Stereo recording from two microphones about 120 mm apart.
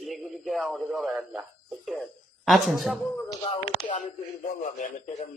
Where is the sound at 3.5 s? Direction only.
50° left (ahead or behind).